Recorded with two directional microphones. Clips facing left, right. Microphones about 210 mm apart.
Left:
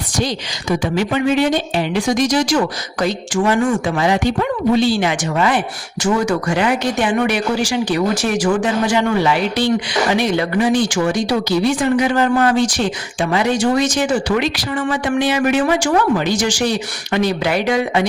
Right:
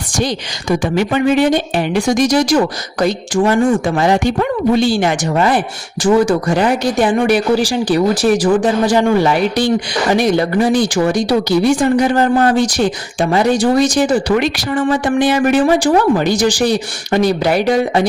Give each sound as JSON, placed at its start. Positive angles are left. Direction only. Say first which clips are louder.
{"t": 0.2, "sound": "a woman's voice", "louder": "right 3 dB", "side_deg": -55}
{"t": 3.8, "sound": "a woman's voice", "louder": "right 3 dB", "side_deg": -45}